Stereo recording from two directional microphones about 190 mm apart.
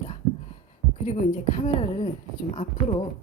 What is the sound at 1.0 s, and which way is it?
Speech, 35° left (ahead or behind).